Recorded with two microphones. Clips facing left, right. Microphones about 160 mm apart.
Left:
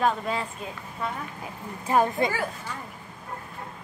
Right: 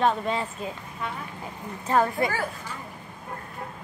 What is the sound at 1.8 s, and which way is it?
Speech, 15° left (ahead or behind).